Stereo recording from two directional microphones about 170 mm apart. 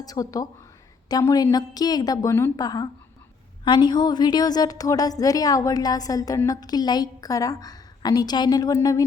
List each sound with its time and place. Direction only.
0.0 s a woman's voice: 20° left (ahead or behind)